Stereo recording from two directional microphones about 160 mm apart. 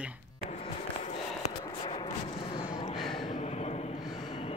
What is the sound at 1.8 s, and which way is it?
Speech, 30° left (ahead or behind).